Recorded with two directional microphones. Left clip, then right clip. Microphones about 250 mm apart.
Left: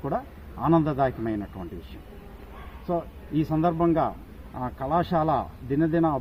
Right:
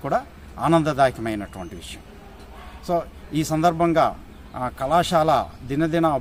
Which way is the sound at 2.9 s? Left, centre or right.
Right.